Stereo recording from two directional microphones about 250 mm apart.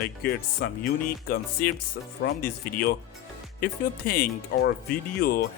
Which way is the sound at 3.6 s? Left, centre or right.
Left.